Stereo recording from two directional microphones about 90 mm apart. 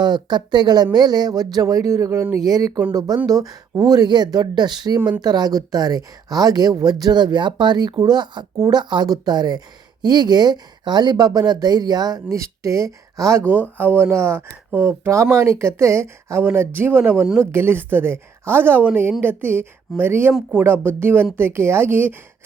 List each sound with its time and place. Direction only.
0.0 s speech: 55° right (ahead or behind)
4.9 s speech: 20° right (ahead or behind)
5.2 s speech: 50° right (ahead or behind)
13.5 s speech: 20° right (ahead or behind)